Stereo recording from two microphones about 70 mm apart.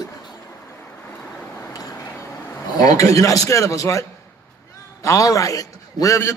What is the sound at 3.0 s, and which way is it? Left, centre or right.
A man's voice, left.